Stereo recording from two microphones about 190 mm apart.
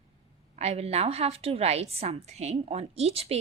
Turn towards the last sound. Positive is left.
turn(degrees=-30)  # may be behind; listen again after turning